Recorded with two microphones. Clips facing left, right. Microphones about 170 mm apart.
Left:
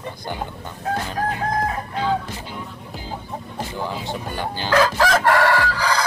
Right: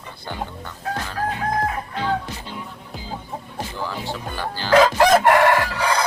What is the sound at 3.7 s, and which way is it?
Speech, 20° left (ahead or behind).